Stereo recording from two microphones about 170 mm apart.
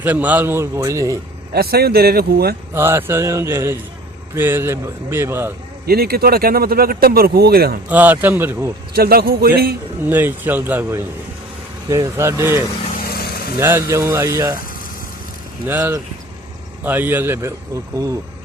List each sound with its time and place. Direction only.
0.0 s speech: 10° right (ahead or behind)
1.5 s a man's voice: 65° right (ahead or behind)
2.7 s speech: 15° right (ahead or behind)
5.8 s speech: 65° right (ahead or behind)
7.9 s speech: 10° right (ahead or behind)
8.9 s speech: 65° right (ahead or behind)
10.1 s speech: 10° right (ahead or behind)
13.1 s vehicle: 65° left (ahead or behind)
13.6 s speech: 15° right (ahead or behind)
15.6 s speech: 15° right (ahead or behind)